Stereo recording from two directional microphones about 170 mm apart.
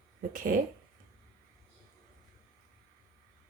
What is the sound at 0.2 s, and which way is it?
Speech, 50° right (ahead or behind).